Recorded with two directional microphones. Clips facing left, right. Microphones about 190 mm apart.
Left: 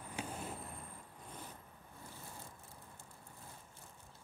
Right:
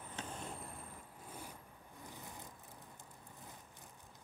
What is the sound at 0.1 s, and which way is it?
Vehicle, 10° left (ahead or behind).